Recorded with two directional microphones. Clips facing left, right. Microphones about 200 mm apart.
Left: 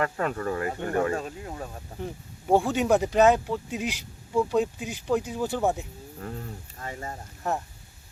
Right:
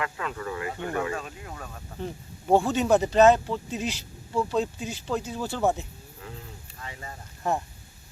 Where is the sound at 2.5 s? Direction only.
15° left (ahead or behind).